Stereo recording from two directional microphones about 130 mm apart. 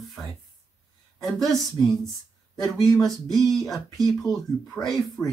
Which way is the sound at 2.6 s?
30° left (ahead or behind).